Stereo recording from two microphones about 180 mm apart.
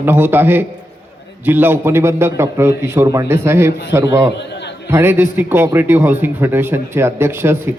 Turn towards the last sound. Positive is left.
turn(degrees=-15)  # may be behind; listen again after turning